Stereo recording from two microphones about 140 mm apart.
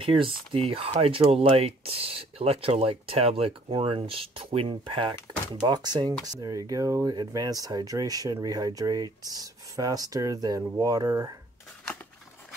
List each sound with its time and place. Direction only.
0.0 s speech: 40° right (ahead or behind)